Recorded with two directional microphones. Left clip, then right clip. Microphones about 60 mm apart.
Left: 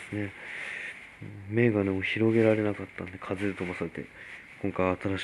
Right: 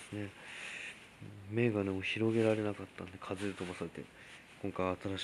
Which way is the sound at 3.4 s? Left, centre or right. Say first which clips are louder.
Left 9 dB; centre.